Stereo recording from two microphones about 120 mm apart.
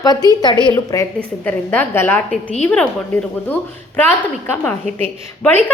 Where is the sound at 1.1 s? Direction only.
15° left (ahead or behind).